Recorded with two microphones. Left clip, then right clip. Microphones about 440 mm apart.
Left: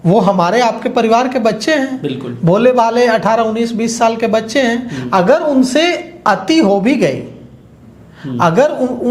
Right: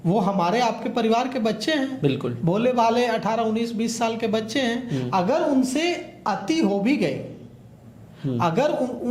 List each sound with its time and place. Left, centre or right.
0.0 s a man's voice: left
8.4 s a man's voice: left